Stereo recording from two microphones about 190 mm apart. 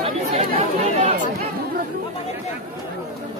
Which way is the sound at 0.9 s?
35° right (ahead or behind).